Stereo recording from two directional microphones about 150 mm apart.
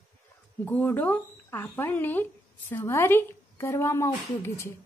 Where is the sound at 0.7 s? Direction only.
10° left (ahead or behind).